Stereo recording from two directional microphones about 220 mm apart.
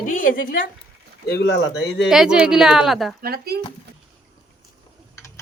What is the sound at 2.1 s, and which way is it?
Speech, 5° right (ahead or behind).